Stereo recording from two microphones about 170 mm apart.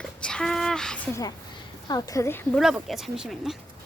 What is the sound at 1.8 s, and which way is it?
Speech, 20° left (ahead or behind).